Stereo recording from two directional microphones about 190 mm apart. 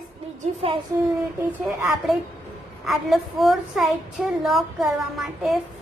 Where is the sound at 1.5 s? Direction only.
10° right (ahead or behind).